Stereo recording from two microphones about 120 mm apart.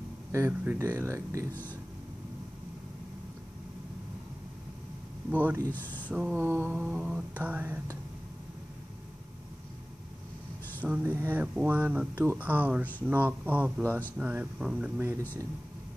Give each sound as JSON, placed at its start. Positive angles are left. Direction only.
{"t": 0.3, "sound": "speech", "side_deg": -20}
{"t": 5.3, "sound": "speech", "side_deg": -15}
{"t": 5.6, "sound": "speech", "side_deg": 15}
{"t": 6.0, "sound": "speech", "side_deg": -10}
{"t": 10.9, "sound": "speech", "side_deg": -15}